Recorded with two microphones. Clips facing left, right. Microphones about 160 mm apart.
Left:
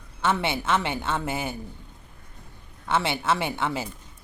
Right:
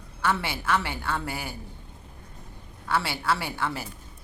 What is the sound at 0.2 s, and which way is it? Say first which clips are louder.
A woman's voice: left 3 dB; 20° left (ahead or behind).